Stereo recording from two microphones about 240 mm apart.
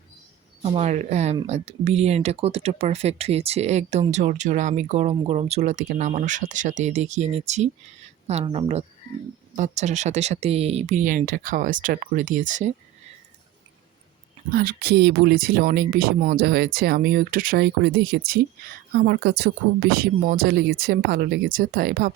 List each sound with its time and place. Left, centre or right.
0.6 s speech: right
14.5 s speech: right